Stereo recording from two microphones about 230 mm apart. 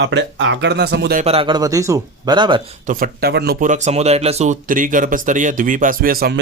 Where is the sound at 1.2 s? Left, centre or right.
Right.